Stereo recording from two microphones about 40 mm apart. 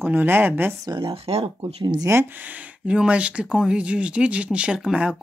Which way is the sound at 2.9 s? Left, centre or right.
Right.